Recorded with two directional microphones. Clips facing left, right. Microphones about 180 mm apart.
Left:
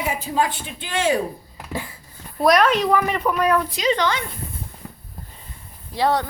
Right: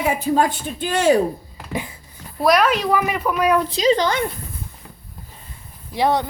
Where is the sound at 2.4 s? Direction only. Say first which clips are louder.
Even; 5° right (ahead or behind).